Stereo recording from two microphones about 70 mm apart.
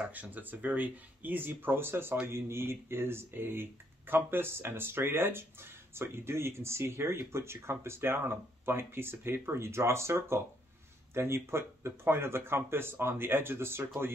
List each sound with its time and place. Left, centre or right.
0.0 s speech: right